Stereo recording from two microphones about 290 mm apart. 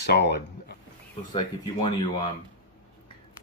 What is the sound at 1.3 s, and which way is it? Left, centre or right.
Speech, centre.